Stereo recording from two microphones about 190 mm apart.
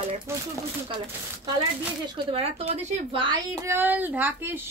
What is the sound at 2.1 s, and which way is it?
A woman's voice, 30° right (ahead or behind).